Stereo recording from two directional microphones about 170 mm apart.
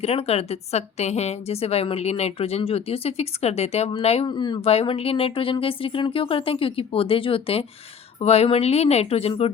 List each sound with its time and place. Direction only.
0.0 s a woman's voice: 35° left (ahead or behind)